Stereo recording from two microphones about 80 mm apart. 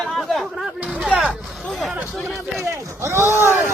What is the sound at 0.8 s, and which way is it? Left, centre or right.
Speech, centre.